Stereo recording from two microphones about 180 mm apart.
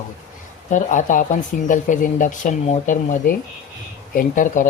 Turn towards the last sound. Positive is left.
turn(degrees=45)  # may be behind; listen again after turning